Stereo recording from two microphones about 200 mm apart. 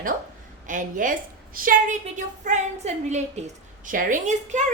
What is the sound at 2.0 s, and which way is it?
A child's voice, 35° right (ahead or behind).